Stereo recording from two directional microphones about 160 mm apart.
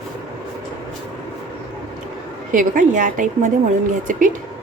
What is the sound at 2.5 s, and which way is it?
A woman's voice, 55° right (ahead or behind).